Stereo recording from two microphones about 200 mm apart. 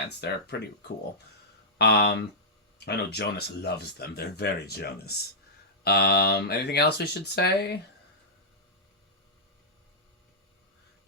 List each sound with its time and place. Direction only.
0.2 s speech: 55° left (ahead or behind)
1.8 s speech: 55° left (ahead or behind)